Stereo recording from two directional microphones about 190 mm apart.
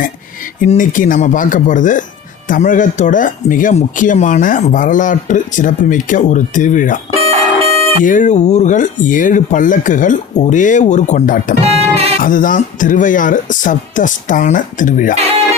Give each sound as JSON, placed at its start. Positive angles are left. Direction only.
{"t": 0.6, "sound": "speech", "side_deg": 45}
{"t": 7.1, "sound": "a sound", "side_deg": -30}
{"t": 8.0, "sound": "speech", "side_deg": 40}
{"t": 11.6, "sound": "music", "side_deg": -35}
{"t": 12.2, "sound": "speech", "side_deg": 45}